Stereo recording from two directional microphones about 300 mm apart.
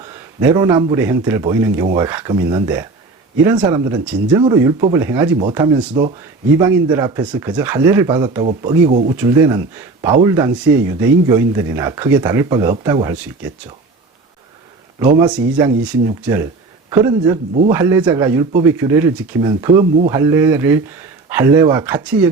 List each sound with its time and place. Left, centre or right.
0.0 s speech: centre
8.9 s speech: right
9.1 s speech: centre
15.3 s speech: centre